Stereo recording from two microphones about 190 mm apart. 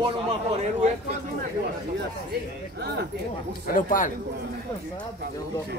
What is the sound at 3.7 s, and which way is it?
Speech, 45° left (ahead or behind).